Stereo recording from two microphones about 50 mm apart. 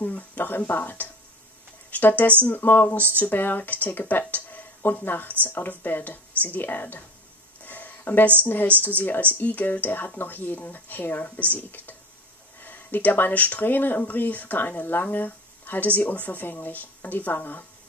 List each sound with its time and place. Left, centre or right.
0.0 s speech: left
7.6 s a sound: left
8.4 s speech: left